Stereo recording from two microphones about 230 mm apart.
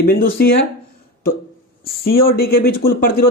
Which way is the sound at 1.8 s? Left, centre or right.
Left.